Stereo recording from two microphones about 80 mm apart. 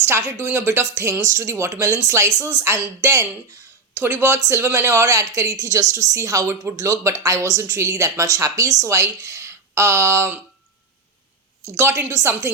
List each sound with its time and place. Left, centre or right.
0.0 s speech: right
11.8 s speech: right